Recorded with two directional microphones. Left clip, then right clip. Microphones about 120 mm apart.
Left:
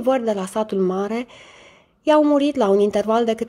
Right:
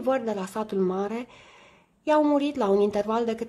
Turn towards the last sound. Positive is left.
turn(degrees=25)  # may be behind; listen again after turning